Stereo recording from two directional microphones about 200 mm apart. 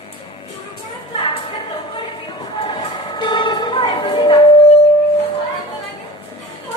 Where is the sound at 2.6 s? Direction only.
20° left (ahead or behind).